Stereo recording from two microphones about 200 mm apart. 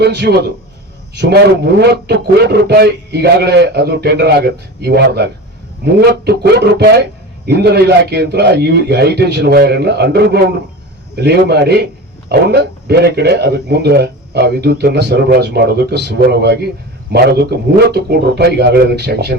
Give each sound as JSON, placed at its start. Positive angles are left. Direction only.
{"t": 0.0, "sound": "speech", "side_deg": -55}